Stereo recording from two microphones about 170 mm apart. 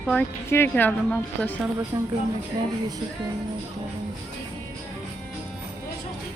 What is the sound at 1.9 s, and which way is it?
Speech, 15° right (ahead or behind).